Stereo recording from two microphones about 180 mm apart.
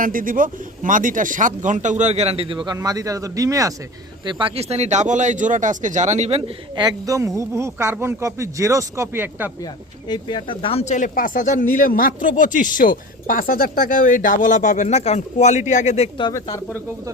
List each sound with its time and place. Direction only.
0.0 s speech: 50° right (ahead or behind); by 3.8 s 20° right (ahead or behind)
4.3 s speech: 30° right (ahead or behind)
6.8 s a man's voice: 20° right (ahead or behind)
10.1 s speech: 25° left (ahead or behind)